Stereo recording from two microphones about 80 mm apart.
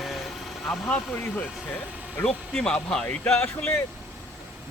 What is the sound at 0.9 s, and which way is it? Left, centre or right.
Speech, centre.